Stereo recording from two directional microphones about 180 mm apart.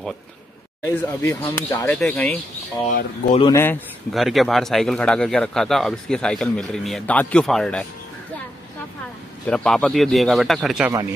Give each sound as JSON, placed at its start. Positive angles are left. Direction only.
{"t": 0.8, "sound": "speech", "side_deg": 15}
{"t": 3.5, "sound": "speech", "side_deg": 10}
{"t": 4.1, "sound": "speech", "side_deg": 0}
{"t": 9.5, "sound": "speech", "side_deg": 5}
{"t": 10.9, "sound": "speech", "side_deg": -20}